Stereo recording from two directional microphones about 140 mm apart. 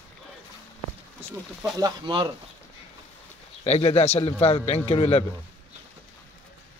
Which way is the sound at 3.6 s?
45° left (ahead or behind).